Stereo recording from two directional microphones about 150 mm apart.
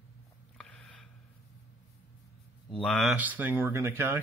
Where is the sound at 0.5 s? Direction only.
5° left (ahead or behind).